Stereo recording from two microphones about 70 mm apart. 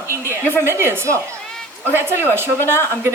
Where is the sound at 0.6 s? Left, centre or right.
Right.